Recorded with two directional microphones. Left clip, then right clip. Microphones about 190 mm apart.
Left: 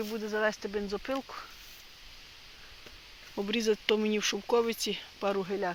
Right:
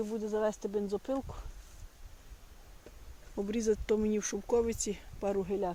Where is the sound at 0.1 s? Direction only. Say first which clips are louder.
Left 5 dB; 5° left (ahead or behind).